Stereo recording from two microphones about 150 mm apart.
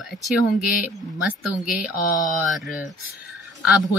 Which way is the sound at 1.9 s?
25° left (ahead or behind).